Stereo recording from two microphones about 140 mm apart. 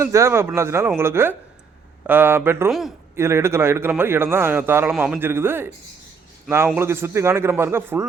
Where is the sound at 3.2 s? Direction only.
20° right (ahead or behind).